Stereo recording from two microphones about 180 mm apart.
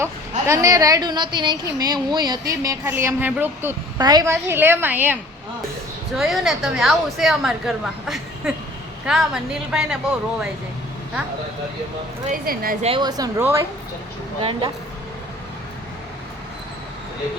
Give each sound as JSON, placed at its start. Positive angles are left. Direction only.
{"t": 0.0, "sound": "a woman's voice", "side_deg": -15}
{"t": 6.1, "sound": "a woman's voice", "side_deg": 0}
{"t": 12.3, "sound": "speech", "side_deg": -55}
{"t": 12.8, "sound": "a woman's voice", "side_deg": -25}